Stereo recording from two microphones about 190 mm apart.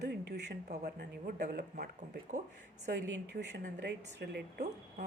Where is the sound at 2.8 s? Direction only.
65° right (ahead or behind).